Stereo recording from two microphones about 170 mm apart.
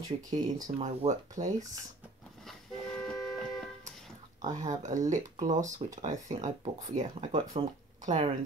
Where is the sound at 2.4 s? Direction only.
5° left (ahead or behind).